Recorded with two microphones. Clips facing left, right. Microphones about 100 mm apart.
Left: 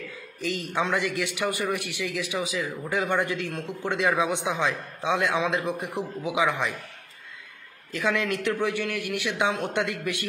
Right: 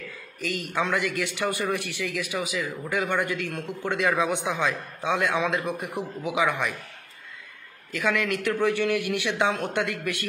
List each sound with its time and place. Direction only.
0.4 s a man's voice: 20° left (ahead or behind)
7.9 s a man's voice: 20° left (ahead or behind)
8.7 s a man's voice: centre (ahead or behind)
9.3 s speech: 15° left (ahead or behind)